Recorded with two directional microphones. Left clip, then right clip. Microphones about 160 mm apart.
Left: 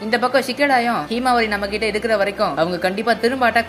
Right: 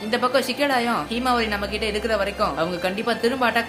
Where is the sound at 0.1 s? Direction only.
25° left (ahead or behind).